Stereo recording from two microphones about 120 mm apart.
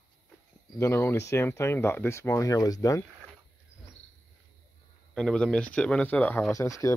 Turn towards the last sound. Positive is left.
turn(degrees=25)  # may be behind; listen again after turning